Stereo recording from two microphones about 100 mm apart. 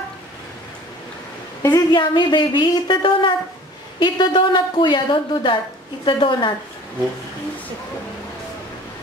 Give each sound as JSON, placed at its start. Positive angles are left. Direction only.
{"t": 1.6, "sound": "speech", "side_deg": 40}